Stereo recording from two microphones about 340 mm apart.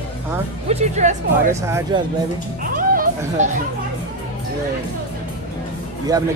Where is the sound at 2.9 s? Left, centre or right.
Right.